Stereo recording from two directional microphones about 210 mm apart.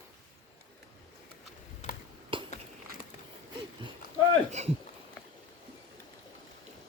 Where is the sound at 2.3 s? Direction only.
25° right (ahead or behind).